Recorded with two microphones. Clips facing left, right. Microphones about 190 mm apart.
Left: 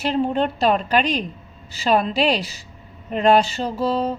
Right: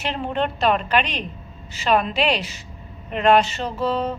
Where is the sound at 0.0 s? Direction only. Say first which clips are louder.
Left 4 dB; 35° left (ahead or behind).